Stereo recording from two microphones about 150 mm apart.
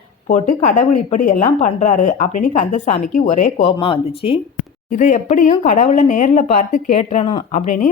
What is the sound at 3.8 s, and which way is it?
Speech, 35° left (ahead or behind).